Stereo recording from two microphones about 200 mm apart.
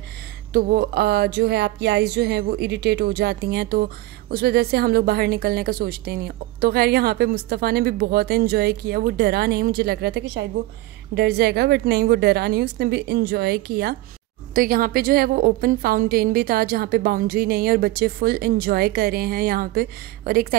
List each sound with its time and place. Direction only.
0.5 s speech: 50° right (ahead or behind)